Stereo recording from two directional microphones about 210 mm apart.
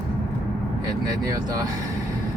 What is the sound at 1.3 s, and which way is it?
Speech, 15° right (ahead or behind).